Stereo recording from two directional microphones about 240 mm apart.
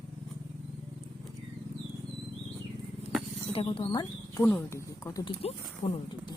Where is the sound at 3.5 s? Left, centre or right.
Left.